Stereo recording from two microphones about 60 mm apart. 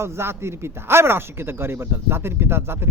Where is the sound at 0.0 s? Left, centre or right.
Right.